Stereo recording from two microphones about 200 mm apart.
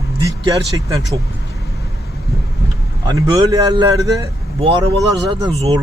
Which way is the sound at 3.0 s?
15° right (ahead or behind).